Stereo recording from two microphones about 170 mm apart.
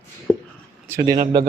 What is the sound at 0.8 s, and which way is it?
Speech, 15° right (ahead or behind).